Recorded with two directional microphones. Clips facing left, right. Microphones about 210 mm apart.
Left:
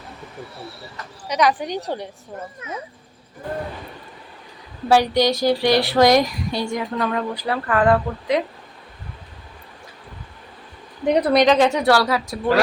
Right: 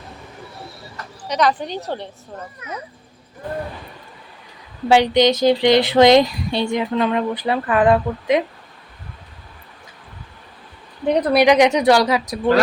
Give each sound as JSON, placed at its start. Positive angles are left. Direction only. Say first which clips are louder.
{"t": 1.3, "sound": "a woman's voice", "louder": "even", "side_deg": 10}
{"t": 4.9, "sound": "a woman's voice", "louder": "right 3 dB", "side_deg": -20}
{"t": 11.1, "sound": "a woman's voice", "louder": "even", "side_deg": 5}
{"t": 11.3, "sound": "speech", "louder": "right 4 dB", "side_deg": -15}